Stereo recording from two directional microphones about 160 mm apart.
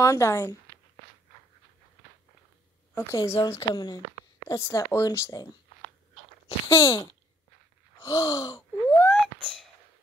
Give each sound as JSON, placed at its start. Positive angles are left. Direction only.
{"t": 0.0, "sound": "speech", "side_deg": 20}
{"t": 2.9, "sound": "speech", "side_deg": 20}
{"t": 6.7, "sound": "speech", "side_deg": 20}
{"t": 8.0, "sound": "gasp", "side_deg": 20}